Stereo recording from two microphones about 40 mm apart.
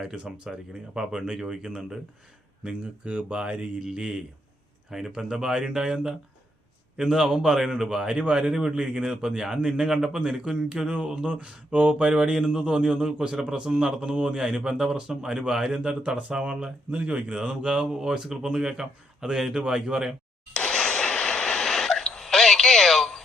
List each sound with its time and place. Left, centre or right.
0.0 s speech: centre
3.8 s speech: centre
4.9 s speech: centre; by 16.7 s right
16.9 s speech: right
17.3 s speech: right
20.5 s a sound: left